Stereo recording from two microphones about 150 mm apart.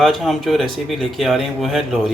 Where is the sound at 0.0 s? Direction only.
Centre (ahead or behind).